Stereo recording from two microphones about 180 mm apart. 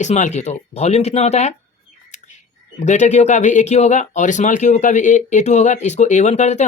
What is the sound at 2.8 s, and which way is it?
Speech, 40° left (ahead or behind).